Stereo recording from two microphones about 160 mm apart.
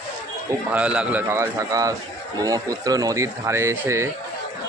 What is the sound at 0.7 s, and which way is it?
Speech, 5° right (ahead or behind).